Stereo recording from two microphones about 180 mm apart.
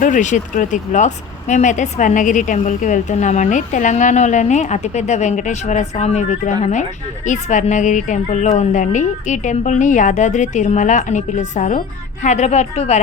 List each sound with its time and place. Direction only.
0.0 s a woman's voice: 45° left (ahead or behind)